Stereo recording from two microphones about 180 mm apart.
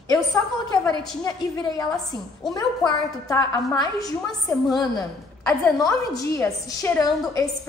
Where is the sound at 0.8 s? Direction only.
20° left (ahead or behind).